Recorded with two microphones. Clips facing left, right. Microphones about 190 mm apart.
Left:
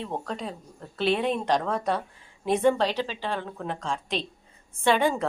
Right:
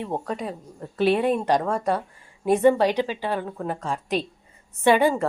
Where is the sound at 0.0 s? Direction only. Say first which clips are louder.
Right 4 dB; 10° right (ahead or behind).